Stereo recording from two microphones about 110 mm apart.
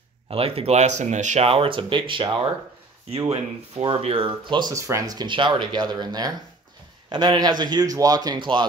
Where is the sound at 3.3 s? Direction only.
60° right (ahead or behind); by 4.7 s 45° right (ahead or behind).